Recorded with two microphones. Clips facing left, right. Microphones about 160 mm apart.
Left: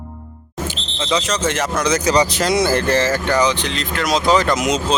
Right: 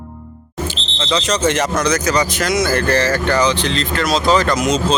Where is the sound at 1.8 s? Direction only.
25° left (ahead or behind).